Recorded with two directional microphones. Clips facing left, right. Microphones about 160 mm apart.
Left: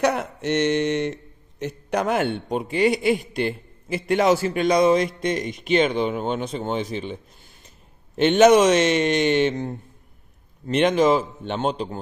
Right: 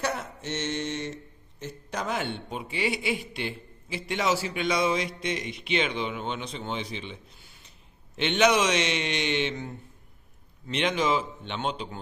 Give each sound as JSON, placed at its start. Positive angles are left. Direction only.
{"t": 0.0, "sound": "speech", "side_deg": 65}